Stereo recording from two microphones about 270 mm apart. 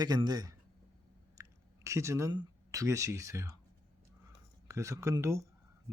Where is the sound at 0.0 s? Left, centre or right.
Centre.